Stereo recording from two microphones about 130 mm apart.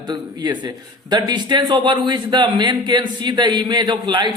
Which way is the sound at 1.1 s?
35° right (ahead or behind).